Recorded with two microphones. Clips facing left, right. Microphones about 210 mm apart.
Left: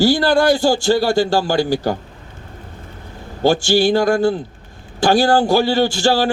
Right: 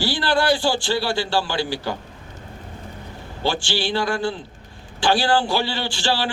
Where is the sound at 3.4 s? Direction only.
45° left (ahead or behind).